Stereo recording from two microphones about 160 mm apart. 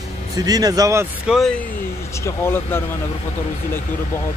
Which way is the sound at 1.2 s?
Centre (ahead or behind).